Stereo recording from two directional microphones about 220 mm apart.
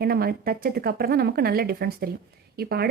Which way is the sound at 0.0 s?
45° right (ahead or behind).